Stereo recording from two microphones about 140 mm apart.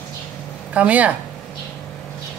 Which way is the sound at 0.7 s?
10° right (ahead or behind).